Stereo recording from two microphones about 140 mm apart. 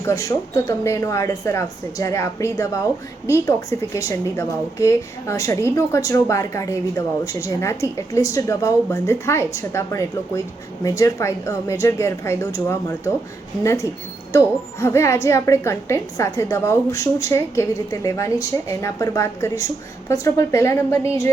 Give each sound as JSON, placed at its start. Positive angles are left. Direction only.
{"t": 0.0, "sound": "a woman's voice", "side_deg": 20}